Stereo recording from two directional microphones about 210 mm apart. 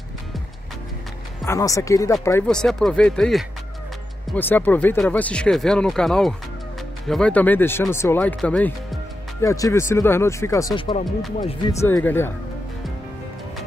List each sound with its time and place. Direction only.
1.4 s speech: 15° left (ahead or behind)
2.4 s speech: 5° left (ahead or behind)